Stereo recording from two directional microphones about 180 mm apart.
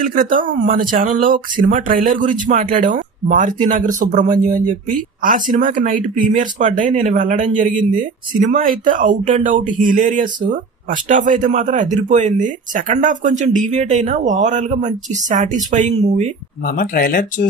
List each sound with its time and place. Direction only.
0.1 s speech: 50° right (ahead or behind)
16.6 s speech: 50° left (ahead or behind)